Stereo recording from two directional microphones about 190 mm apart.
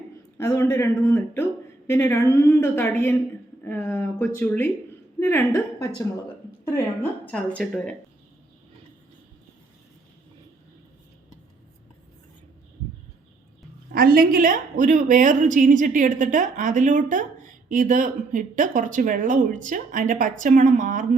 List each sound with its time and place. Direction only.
0.3 s a woman's voice: 15° left (ahead or behind)
7.3 s speech: 5° left (ahead or behind)
13.9 s a woman's voice: 50° right (ahead or behind)